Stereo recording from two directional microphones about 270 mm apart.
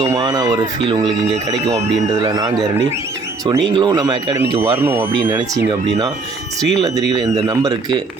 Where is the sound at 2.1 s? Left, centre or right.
Centre.